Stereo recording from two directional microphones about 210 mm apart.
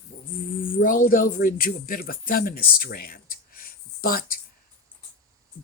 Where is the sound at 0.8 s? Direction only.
40° left (ahead or behind).